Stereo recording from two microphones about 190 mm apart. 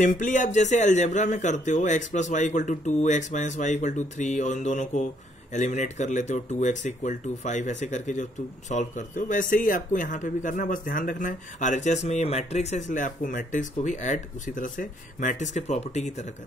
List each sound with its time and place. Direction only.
0.0 s speech: 45° left (ahead or behind)